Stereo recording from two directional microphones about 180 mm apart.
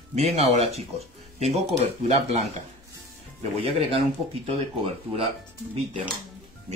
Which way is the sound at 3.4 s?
35° right (ahead or behind).